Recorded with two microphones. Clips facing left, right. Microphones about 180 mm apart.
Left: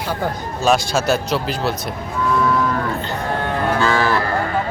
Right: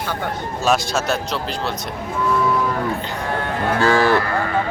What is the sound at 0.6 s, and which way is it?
Speech, centre (ahead or behind).